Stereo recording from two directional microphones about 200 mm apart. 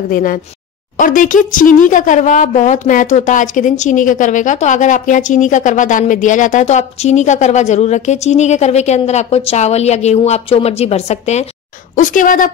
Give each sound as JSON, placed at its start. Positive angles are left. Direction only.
{"t": 0.1, "sound": "speech", "side_deg": 45}